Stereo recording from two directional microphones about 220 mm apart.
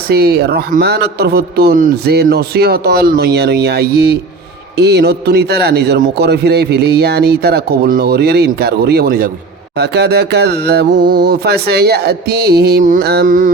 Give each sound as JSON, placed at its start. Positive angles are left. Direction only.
{"t": 0.1, "sound": "a man's voice", "side_deg": -45}
{"t": 11.0, "sound": "speech", "side_deg": -20}
{"t": 11.3, "sound": "a man's voice", "side_deg": -45}